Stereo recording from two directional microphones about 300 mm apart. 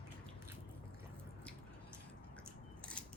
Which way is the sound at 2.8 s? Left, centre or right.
Centre.